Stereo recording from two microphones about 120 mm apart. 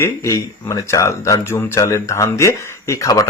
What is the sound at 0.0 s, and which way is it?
Speech, 25° left (ahead or behind).